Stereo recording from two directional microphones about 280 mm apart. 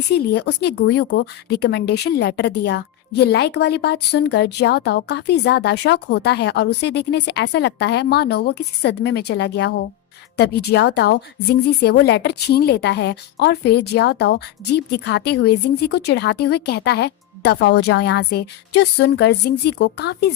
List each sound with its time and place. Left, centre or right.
0.3 s a woman's voice: left